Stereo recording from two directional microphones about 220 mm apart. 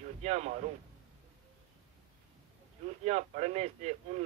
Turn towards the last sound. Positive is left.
turn(degrees=-30)  # may be behind; listen again after turning